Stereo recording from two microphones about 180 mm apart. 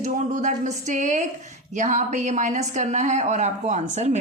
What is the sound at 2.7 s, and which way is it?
Speech, 45° right (ahead or behind).